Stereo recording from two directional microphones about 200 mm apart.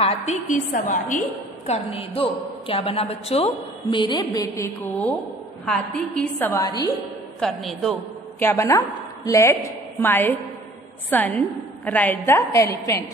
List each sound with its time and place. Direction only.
0.0 s a woman's voice: 35° left (ahead or behind)
1.7 s a woman's voice: 30° left (ahead or behind); by 6.5 s 5° left (ahead or behind)
6.5 s a woman's voice: 20° left (ahead or behind)
7.3 s a woman's voice: centre (ahead or behind)